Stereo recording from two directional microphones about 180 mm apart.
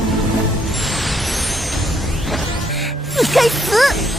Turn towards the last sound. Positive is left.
turn(degrees=0)  # may be behind; listen again after turning